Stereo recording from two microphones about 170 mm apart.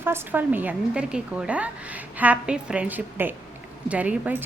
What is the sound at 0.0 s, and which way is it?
A woman's voice, 10° right (ahead or behind).